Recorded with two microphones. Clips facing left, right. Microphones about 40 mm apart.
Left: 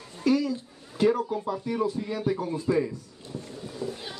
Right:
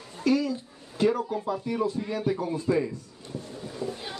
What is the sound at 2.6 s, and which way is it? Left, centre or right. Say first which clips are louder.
Speech: left 1 dB; centre.